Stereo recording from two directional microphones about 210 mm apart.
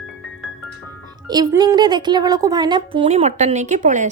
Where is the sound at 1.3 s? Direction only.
20° right (ahead or behind).